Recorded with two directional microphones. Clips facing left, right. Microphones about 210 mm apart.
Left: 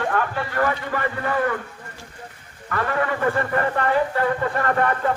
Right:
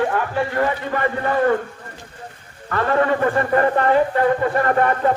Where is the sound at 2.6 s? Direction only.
35° right (ahead or behind).